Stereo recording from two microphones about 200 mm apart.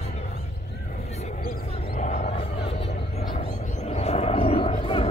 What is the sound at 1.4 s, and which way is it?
Vehicle, 45° left (ahead or behind).